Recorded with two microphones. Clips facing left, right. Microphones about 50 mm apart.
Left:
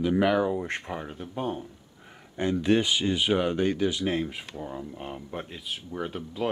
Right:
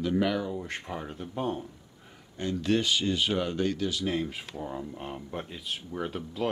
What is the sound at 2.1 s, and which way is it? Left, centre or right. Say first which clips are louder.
Speech: left 5 dB; left.